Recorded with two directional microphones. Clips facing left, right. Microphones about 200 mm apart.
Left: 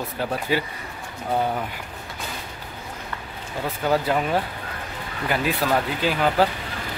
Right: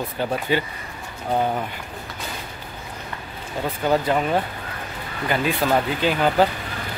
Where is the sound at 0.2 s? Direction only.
5° left (ahead or behind).